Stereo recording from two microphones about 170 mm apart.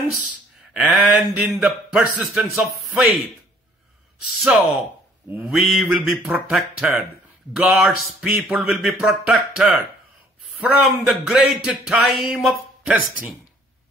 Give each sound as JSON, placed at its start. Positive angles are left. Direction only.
{"t": 0.7, "sound": "speech", "side_deg": 0}
{"t": 4.4, "sound": "speech", "side_deg": 0}